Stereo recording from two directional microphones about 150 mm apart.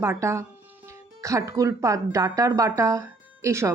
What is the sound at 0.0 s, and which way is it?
Speech, 20° right (ahead or behind).